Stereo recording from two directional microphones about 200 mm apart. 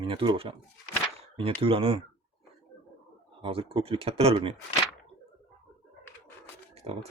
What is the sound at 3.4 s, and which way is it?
Speech, 30° right (ahead or behind).